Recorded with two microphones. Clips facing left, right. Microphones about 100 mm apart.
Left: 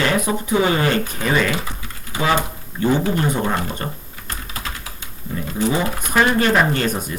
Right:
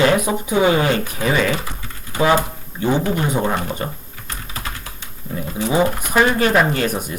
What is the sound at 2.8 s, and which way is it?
Speech, 15° right (ahead or behind).